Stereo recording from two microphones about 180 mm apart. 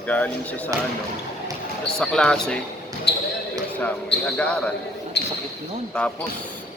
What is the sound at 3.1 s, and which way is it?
Basketball bounce, 70° left (ahead or behind).